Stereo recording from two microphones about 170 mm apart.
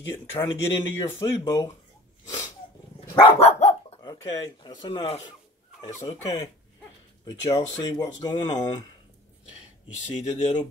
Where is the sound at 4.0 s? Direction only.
25° left (ahead or behind).